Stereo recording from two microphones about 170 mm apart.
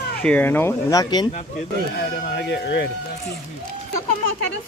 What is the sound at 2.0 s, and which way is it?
Speech, 75° left (ahead or behind).